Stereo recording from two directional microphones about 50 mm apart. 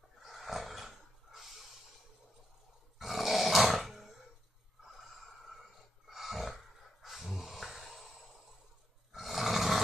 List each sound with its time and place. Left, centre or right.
0.2 s roar: centre
3.0 s roar: centre
4.8 s a sound: centre
9.1 s roar: centre